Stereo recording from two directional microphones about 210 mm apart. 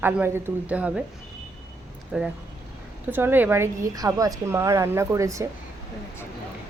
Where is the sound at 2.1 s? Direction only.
5° right (ahead or behind).